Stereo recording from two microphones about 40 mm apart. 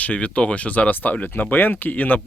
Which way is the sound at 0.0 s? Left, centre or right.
Left.